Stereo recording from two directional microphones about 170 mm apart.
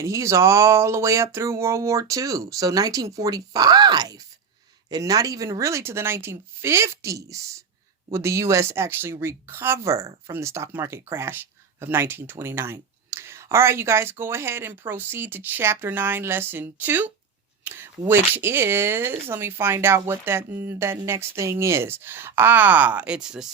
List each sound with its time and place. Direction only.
0.0 s speech: 15° right (ahead or behind)